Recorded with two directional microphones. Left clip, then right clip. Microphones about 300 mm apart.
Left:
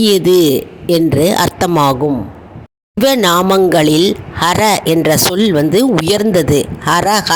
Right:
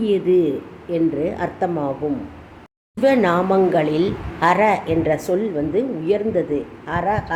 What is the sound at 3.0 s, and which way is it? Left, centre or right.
Speech, left.